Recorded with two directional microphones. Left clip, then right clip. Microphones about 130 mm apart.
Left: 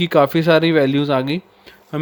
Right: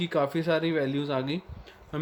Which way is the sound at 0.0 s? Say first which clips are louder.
Left 12 dB; 80° left.